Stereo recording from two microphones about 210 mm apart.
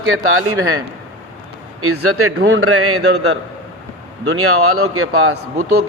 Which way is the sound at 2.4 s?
75° right (ahead or behind).